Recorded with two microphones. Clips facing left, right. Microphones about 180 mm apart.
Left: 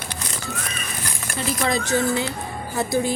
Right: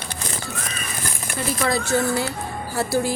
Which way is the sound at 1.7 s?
20° left (ahead or behind).